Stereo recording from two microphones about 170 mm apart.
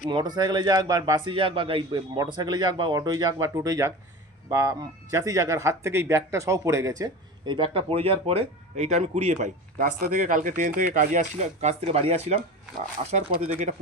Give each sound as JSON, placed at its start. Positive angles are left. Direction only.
{"t": 0.1, "sound": "speech", "side_deg": -25}
{"t": 7.0, "sound": "speech", "side_deg": -30}